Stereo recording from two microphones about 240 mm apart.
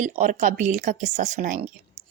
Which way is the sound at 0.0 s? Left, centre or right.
Right.